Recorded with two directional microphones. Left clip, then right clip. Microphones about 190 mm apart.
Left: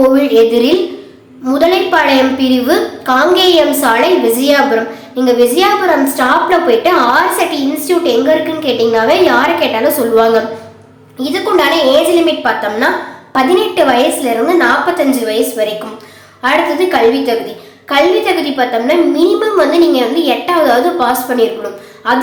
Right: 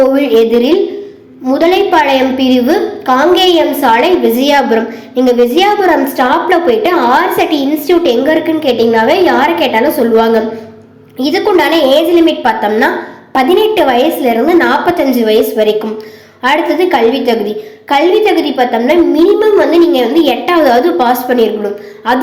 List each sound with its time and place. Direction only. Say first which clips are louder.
0.1 s a woman's voice: even; 10° right (ahead or behind)
18.5 s a woman's voice: right 2 dB; 15° right (ahead or behind)